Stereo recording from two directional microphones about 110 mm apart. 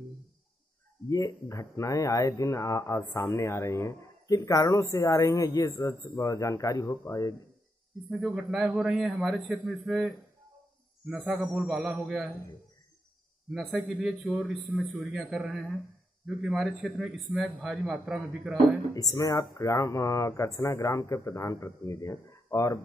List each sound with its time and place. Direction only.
1.0 s speech: 30° left (ahead or behind)
8.1 s a man's voice: centre (ahead or behind)
13.5 s a man's voice: centre (ahead or behind)
18.9 s speech: 30° left (ahead or behind)
22.3 s a sound: 25° left (ahead or behind)